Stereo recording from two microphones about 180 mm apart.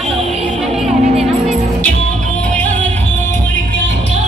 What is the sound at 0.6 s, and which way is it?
Music, centre (ahead or behind).